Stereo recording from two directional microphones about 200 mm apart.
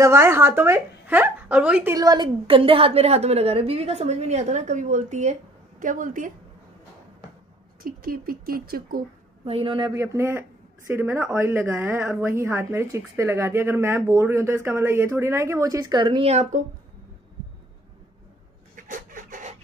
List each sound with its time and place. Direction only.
0.0 s speech: 15° right (ahead or behind); by 6.3 s 40° right (ahead or behind)
7.8 s speech: 45° right (ahead or behind)
9.5 s speech: 25° right (ahead or behind)
18.8 s a sound: 40° right (ahead or behind)